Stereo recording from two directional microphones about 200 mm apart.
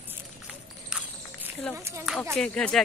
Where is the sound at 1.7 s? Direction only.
15° right (ahead or behind).